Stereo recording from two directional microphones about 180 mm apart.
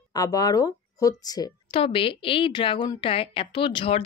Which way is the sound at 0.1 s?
20° left (ahead or behind).